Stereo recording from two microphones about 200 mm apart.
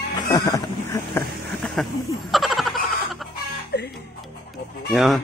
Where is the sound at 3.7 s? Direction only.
55° left (ahead or behind).